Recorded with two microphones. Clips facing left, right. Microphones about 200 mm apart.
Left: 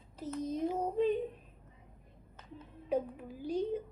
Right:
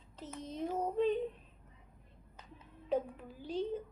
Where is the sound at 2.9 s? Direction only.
10° left (ahead or behind).